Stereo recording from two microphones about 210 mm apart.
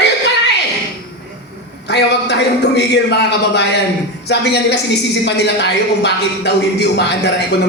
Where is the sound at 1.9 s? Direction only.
55° left (ahead or behind).